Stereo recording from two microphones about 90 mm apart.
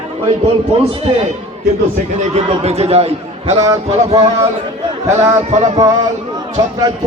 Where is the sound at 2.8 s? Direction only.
90° right.